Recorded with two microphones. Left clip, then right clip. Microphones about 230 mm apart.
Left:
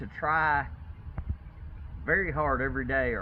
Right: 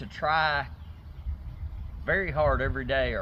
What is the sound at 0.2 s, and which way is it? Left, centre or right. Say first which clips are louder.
Speech: right 1 dB; right.